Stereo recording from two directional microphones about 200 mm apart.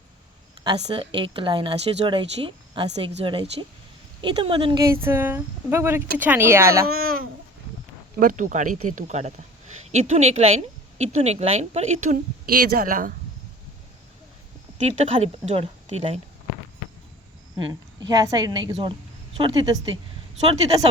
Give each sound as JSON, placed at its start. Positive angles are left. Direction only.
{"t": 0.6, "sound": "speech", "side_deg": -25}
{"t": 5.0, "sound": "speech", "side_deg": -10}
{"t": 6.8, "sound": "a woman's voice", "side_deg": -45}
{"t": 14.8, "sound": "a woman's voice", "side_deg": -35}
{"t": 18.1, "sound": "speech", "side_deg": -20}